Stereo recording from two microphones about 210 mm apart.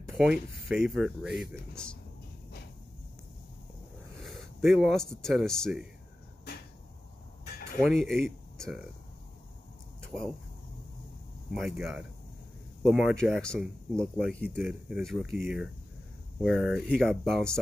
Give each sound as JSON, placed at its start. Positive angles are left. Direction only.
{"t": 0.1, "sound": "speech", "side_deg": 0}
{"t": 4.2, "sound": "speech", "side_deg": 0}
{"t": 7.8, "sound": "speech", "side_deg": 0}
{"t": 10.0, "sound": "speech", "side_deg": 0}
{"t": 11.5, "sound": "speech", "side_deg": 0}